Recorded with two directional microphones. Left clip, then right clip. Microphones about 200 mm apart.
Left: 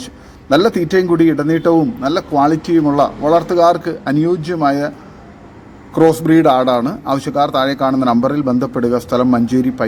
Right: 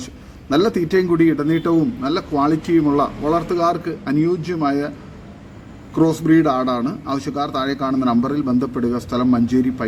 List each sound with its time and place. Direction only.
0.5 s a man's voice: 10° left (ahead or behind)
5.9 s a man's voice: 10° left (ahead or behind)